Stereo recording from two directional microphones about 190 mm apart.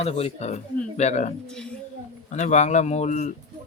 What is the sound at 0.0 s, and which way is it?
Speech, 30° left (ahead or behind).